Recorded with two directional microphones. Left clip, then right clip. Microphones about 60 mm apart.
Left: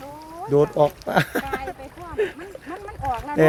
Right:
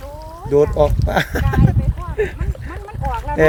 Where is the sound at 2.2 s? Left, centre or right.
Right.